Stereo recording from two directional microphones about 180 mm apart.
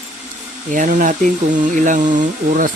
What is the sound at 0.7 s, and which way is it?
Speech, 45° right (ahead or behind).